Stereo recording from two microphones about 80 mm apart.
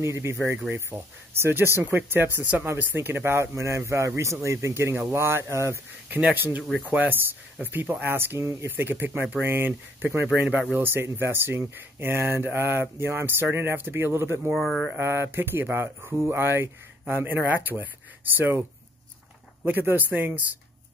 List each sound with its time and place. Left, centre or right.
0.0 s speech: right
6.0 s speech: right
8.6 s speech: right
14.5 s speech: centre
15.0 s speech: right